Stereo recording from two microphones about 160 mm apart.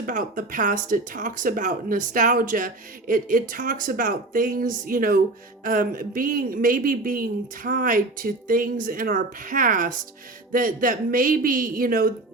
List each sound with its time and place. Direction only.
0.0 s speech: 55° right (ahead or behind)